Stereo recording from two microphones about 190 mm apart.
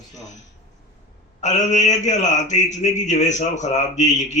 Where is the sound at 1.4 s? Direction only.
40° left (ahead or behind).